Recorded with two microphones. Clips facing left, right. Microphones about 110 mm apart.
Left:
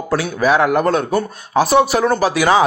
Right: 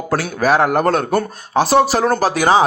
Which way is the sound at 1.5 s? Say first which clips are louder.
Even; 30° right (ahead or behind).